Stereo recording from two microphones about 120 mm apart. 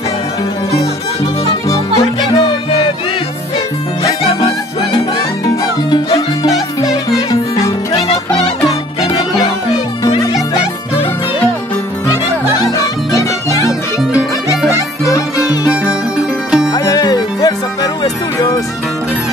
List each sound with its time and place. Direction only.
2.0 s music: 55° left (ahead or behind)
4.2 s music: 55° left (ahead or behind)
6.1 s music: 30° left (ahead or behind)
12.1 s music: 30° left (ahead or behind)
15.7 s music: 10° right (ahead or behind)
16.7 s music: 30° left (ahead or behind)